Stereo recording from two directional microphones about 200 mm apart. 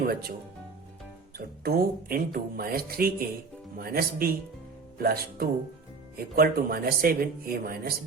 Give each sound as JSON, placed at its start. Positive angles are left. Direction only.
{"t": 0.0, "sound": "speech", "side_deg": -45}
{"t": 1.4, "sound": "speech", "side_deg": -50}